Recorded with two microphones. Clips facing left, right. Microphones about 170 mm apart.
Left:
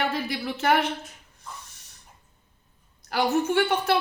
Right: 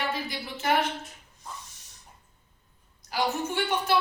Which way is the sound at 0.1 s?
60° left (ahead or behind).